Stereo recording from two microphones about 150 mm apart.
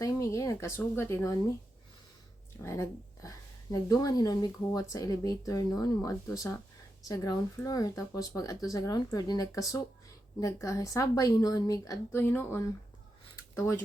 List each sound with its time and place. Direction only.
0.0 s speech: 20° left (ahead or behind)
2.6 s speech: 20° left (ahead or behind)
13.3 s a sound: 20° left (ahead or behind)